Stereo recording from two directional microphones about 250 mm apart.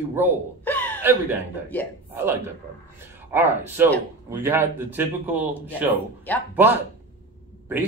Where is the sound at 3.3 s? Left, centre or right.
Centre.